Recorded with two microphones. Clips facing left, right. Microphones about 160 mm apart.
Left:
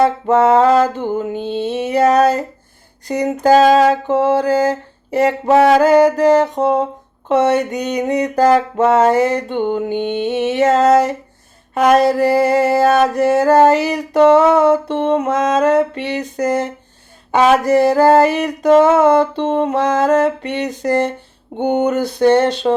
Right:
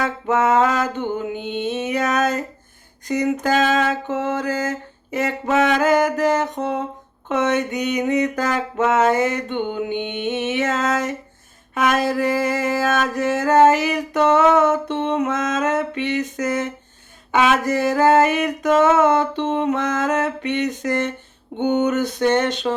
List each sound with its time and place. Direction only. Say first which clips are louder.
0.3 s music: left 4 dB; 35° left (ahead or behind)